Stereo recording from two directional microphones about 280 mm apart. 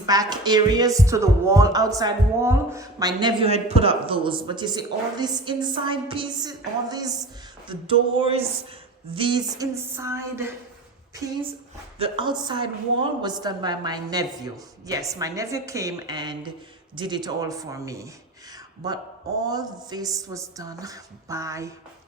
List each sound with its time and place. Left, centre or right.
0.0 s speech: centre
7.7 s a sound: centre
9.1 s speech: centre
11.9 s speech: centre